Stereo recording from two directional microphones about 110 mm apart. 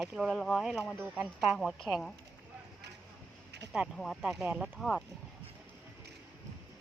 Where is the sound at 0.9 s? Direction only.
15° right (ahead or behind).